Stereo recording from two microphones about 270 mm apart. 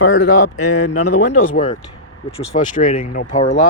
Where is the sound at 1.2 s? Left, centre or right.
Left.